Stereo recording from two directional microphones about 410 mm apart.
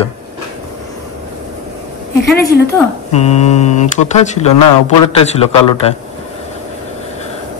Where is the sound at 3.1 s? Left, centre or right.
Centre.